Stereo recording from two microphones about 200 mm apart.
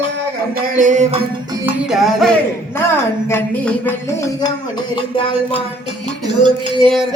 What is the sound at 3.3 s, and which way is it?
Music, 10° left (ahead or behind).